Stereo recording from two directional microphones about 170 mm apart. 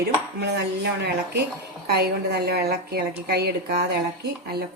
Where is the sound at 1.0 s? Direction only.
80° right.